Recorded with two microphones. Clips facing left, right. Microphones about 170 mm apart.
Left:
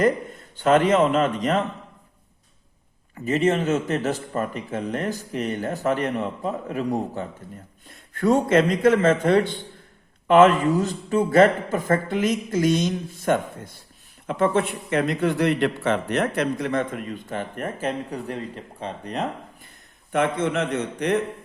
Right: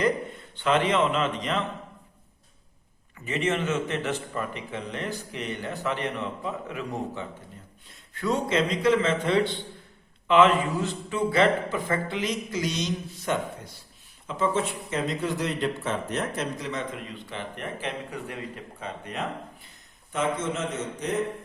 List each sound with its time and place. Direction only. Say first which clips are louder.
0.0 s a man's voice: left 4 dB; 45° left (ahead or behind)
3.2 s a man's voice: left 6 dB; 40° left (ahead or behind)
7.9 s a man's voice: left 7 dB; 50° left (ahead or behind)
14.3 s a man's voice: left 5 dB; 60° left (ahead or behind); by 19.2 s 35° left (ahead or behind)
20.1 s speech: left 6 dB; 60° left (ahead or behind)